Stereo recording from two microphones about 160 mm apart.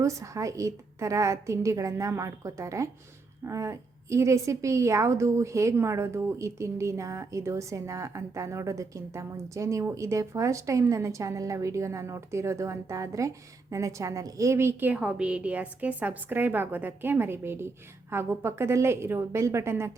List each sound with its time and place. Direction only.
0.0 s a woman's voice: 20° right (ahead or behind)